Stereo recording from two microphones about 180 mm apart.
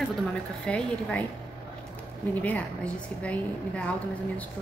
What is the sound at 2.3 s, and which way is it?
A woman's voice, 10° left (ahead or behind).